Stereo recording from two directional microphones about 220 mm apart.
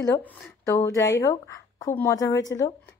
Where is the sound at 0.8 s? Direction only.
15° left (ahead or behind).